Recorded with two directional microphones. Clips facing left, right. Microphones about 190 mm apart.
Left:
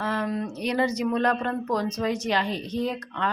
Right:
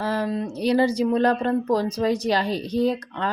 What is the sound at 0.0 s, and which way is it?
Speech, 30° right (ahead or behind).